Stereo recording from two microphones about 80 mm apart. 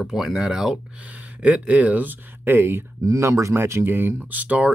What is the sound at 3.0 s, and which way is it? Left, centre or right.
Speech, right.